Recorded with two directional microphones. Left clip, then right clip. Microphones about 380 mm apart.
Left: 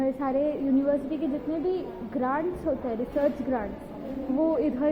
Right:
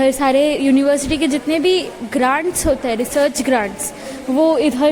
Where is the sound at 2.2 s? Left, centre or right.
Right.